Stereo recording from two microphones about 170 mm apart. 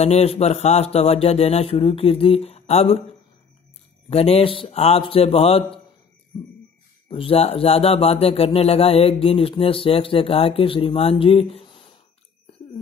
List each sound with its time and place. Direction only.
0.0 s speech: 40° left (ahead or behind)
4.1 s speech: 35° left (ahead or behind)
7.1 s speech: 35° left (ahead or behind)